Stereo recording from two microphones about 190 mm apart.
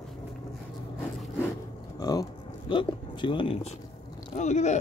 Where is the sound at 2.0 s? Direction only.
20° left (ahead or behind).